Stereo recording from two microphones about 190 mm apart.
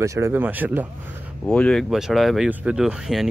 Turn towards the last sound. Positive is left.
turn(degrees=0)  # may be behind; listen again after turning